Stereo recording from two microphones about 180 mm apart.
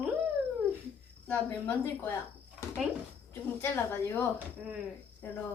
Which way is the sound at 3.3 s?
10° left (ahead or behind).